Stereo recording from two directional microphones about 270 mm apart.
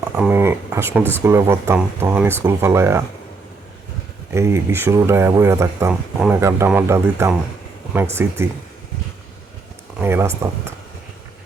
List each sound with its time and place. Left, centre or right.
0.2 s speech: centre
4.3 s speech: centre
10.0 s speech: centre